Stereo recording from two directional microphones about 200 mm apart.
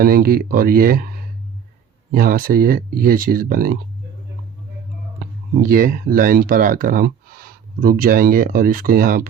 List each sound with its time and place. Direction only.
0.0 s speech: 50° right (ahead or behind)
5.2 s speech: 45° right (ahead or behind)